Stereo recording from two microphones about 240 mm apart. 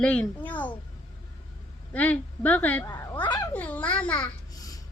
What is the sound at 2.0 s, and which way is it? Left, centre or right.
A child's voice, centre.